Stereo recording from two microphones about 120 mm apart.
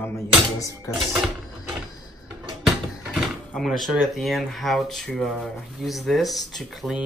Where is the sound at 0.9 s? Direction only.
25° left (ahead or behind).